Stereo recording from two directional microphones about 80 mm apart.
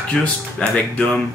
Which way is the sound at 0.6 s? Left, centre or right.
Centre.